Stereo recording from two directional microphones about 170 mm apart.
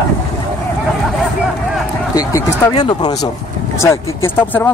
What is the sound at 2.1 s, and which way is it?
Speech, 20° left (ahead or behind).